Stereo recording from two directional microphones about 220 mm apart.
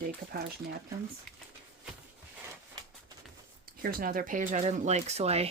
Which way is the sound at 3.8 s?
40° right (ahead or behind).